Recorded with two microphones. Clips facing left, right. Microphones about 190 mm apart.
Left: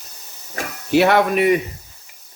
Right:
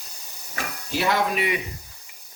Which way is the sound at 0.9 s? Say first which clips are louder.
Left 9 dB; 65° left (ahead or behind).